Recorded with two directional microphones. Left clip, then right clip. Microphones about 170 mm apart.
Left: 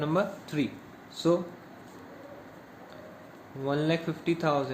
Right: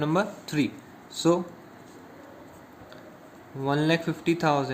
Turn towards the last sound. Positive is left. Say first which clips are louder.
# right 3 dB
turn(degrees=-60)  # may be behind; listen again after turning